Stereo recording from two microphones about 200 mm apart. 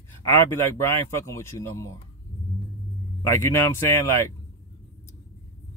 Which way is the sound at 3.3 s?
15° left (ahead or behind).